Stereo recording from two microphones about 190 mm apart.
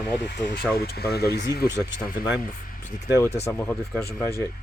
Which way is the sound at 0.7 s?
55° left (ahead or behind).